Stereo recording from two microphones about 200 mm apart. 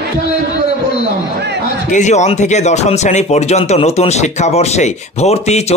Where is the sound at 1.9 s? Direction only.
35° left (ahead or behind).